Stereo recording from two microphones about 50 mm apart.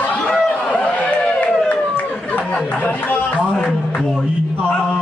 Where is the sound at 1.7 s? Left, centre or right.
Left.